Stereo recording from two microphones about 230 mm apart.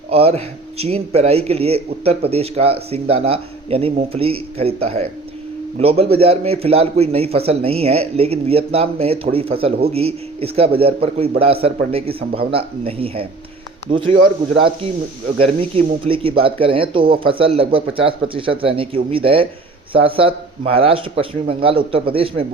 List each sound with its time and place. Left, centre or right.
0.1 s a man's voice: right
15.4 s a man's voice: right